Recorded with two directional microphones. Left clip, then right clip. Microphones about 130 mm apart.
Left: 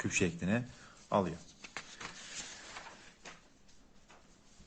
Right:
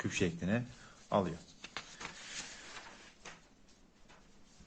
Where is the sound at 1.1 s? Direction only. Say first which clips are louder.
Left 1 dB; 5° left (ahead or behind).